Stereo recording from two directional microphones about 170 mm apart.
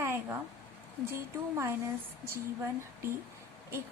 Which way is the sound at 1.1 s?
15° right (ahead or behind).